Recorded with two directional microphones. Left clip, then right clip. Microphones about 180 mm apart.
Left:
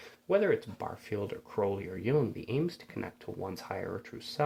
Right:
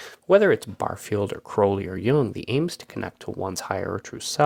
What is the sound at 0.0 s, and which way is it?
Speech, 35° right (ahead or behind).